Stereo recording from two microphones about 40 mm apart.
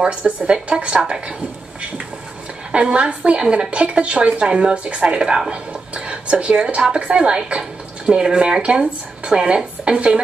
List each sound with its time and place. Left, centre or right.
0.1 s a woman's voice: right
2.7 s a woman's voice: right